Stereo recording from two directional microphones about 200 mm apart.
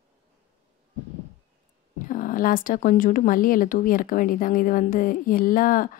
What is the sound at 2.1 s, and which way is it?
Speech, 40° left (ahead or behind).